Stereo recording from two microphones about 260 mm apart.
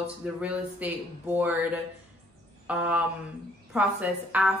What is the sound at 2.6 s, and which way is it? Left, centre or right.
A woman's voice, centre.